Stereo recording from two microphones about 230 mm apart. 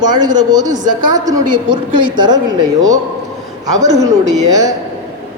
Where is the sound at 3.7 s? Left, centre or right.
Centre.